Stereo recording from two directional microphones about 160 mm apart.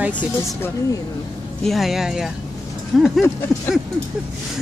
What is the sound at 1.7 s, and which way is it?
Speech, centre (ahead or behind).